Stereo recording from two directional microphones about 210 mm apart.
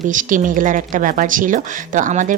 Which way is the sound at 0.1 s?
40° right (ahead or behind).